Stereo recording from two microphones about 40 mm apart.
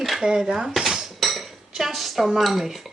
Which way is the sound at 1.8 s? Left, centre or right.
Centre.